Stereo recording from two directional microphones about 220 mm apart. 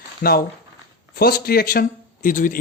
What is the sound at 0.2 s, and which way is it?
A man's voice, 45° left (ahead or behind).